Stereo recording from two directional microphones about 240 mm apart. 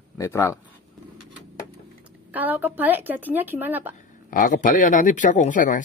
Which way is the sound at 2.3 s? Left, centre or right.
Centre.